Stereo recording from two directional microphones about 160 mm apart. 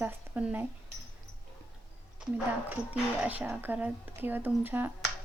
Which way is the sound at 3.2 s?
10° right (ahead or behind).